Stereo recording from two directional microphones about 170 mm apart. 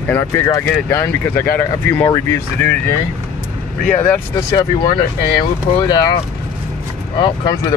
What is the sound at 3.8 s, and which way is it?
Speech, 10° left (ahead or behind).